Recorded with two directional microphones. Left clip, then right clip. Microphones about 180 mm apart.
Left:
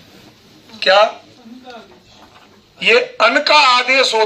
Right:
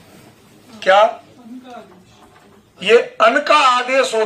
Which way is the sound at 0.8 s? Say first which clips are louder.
Even; 15° left (ahead or behind).